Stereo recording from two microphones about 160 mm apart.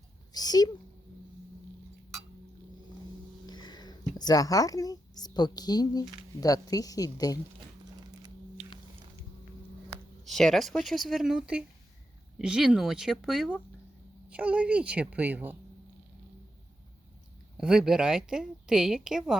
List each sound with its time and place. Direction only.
0.3 s a sound: 25° left (ahead or behind)
3.4 s speech: 25° left (ahead or behind)
10.2 s a woman's voice: centre (ahead or behind)
17.6 s a woman's voice: 5° right (ahead or behind)